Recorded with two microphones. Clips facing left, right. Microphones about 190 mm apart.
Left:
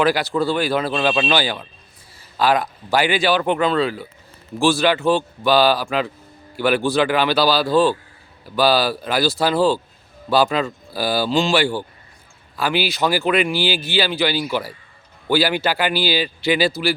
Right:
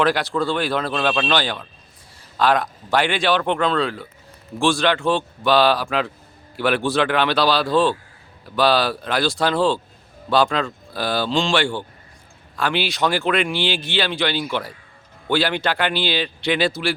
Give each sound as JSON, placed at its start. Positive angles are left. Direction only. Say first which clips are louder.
{"t": 0.0, "sound": "speech", "louder": "left 1 dB", "side_deg": 0}